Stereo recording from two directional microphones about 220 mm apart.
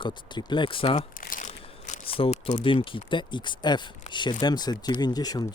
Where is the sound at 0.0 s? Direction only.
20° left (ahead or behind).